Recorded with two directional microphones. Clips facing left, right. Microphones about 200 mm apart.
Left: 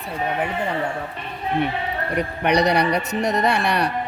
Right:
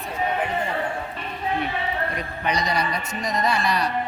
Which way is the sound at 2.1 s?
65° left (ahead or behind).